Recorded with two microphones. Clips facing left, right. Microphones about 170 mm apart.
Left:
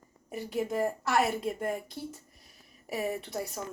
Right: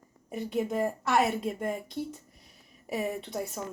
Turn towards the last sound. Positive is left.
turn(degrees=0)  # may be behind; listen again after turning